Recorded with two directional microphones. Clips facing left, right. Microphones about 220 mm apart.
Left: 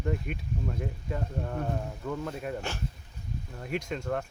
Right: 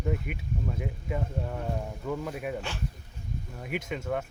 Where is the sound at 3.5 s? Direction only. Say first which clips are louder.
Left 1 dB; 5° right (ahead or behind).